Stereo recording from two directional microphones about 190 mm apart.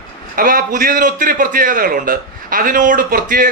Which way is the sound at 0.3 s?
50° right (ahead or behind).